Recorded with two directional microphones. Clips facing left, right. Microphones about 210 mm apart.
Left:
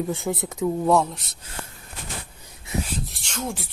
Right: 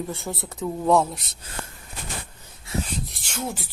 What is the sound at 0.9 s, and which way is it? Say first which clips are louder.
Speech: right 1 dB; centre (ahead or behind).